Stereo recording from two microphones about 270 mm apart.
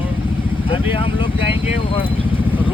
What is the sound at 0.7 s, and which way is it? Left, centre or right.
Speech, centre.